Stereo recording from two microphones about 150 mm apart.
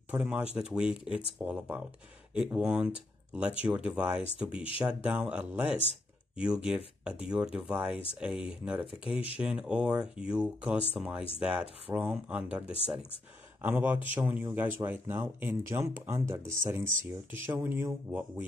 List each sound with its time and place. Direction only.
0.1 s speech: 5° right (ahead or behind)